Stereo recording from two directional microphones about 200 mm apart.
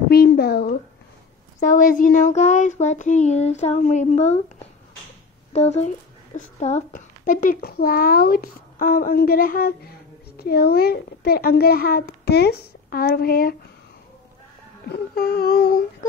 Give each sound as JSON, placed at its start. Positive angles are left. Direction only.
{"t": 0.1, "sound": "a sound", "side_deg": 50}
{"t": 1.6, "sound": "speech", "side_deg": 40}
{"t": 5.5, "sound": "a woman's voice", "side_deg": 35}
{"t": 14.9, "sound": "a woman's voice", "side_deg": 50}